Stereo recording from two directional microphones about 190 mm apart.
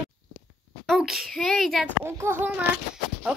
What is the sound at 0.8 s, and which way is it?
A child's voice, centre (ahead or behind).